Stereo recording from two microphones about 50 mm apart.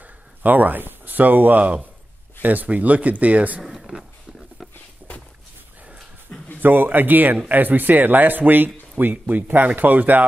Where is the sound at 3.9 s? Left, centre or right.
Centre.